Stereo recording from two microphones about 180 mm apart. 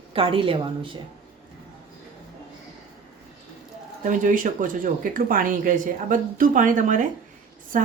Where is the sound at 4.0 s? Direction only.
45° right (ahead or behind).